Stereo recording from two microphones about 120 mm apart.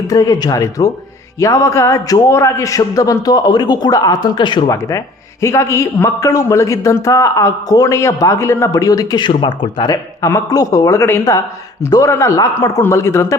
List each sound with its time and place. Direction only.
0.1 s a man's voice: 30° left (ahead or behind)
4.7 s a man's voice: 30° left (ahead or behind)
9.9 s a man's voice: 25° left (ahead or behind)